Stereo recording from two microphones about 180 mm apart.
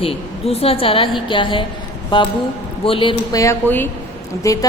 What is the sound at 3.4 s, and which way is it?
A woman's voice, 15° left (ahead or behind).